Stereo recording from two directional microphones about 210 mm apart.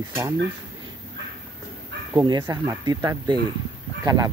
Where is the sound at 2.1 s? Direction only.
20° right (ahead or behind).